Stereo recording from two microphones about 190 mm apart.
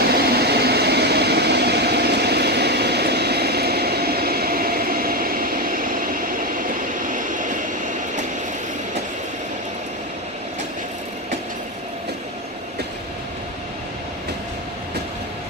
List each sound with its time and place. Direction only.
0.0 s vehicle: 55° right (ahead or behind)